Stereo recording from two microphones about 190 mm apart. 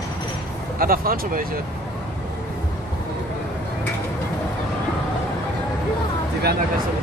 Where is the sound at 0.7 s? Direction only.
50° right (ahead or behind).